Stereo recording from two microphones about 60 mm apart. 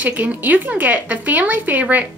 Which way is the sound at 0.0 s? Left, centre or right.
Right.